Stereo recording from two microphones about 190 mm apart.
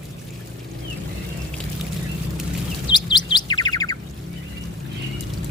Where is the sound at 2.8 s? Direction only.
25° left (ahead or behind).